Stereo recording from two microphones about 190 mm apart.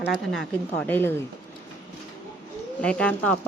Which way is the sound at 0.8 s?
10° left (ahead or behind).